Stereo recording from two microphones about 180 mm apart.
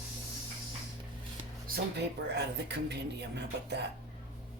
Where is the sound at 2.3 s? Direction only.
70° right (ahead or behind).